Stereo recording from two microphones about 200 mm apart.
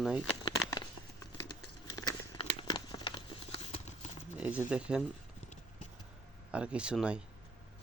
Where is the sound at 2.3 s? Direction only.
25° left (ahead or behind).